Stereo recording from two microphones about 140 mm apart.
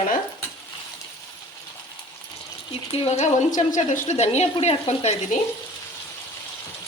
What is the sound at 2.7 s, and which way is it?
A woman's voice, 45° left (ahead or behind).